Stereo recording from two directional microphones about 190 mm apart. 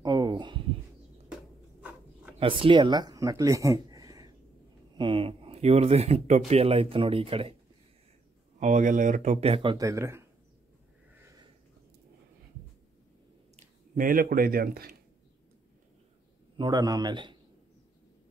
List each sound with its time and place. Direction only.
0.0 s a sound: 20° right (ahead or behind)
1.8 s a sound: 10° right (ahead or behind)
2.4 s speech: 25° right (ahead or behind)
8.5 s speech: 40° right (ahead or behind); by 10.2 s 15° right (ahead or behind)
13.6 s speech: 45° right (ahead or behind)
16.5 s a man's voice: 20° right (ahead or behind)